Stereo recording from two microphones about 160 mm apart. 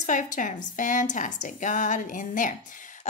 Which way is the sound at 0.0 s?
55° left (ahead or behind).